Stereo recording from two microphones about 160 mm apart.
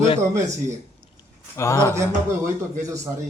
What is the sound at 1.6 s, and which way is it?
Speech, 20° left (ahead or behind).